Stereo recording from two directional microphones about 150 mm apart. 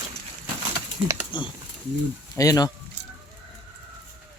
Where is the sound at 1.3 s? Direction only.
30° left (ahead or behind).